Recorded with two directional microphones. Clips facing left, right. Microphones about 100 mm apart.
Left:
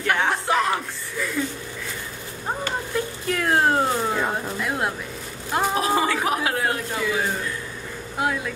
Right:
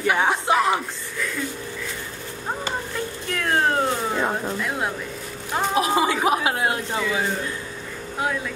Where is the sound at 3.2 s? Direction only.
5° left (ahead or behind).